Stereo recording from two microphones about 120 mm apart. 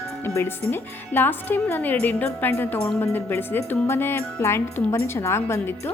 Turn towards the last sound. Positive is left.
turn(degrees=20)  # may be behind; listen again after turning